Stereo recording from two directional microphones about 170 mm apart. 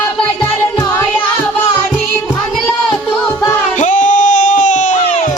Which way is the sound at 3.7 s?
45° left (ahead or behind).